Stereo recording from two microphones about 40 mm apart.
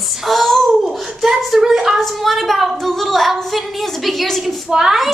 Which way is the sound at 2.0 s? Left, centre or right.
Centre.